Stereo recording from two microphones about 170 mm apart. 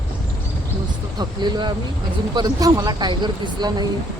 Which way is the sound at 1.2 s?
25° right (ahead or behind).